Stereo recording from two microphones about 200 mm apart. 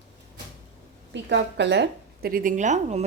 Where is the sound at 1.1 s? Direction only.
60° right (ahead or behind); by 3.0 s 35° right (ahead or behind).